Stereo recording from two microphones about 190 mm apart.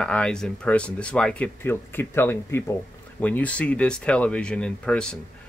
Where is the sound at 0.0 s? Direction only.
5° left (ahead or behind).